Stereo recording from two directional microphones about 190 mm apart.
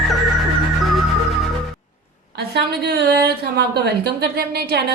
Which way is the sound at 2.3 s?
60° right (ahead or behind).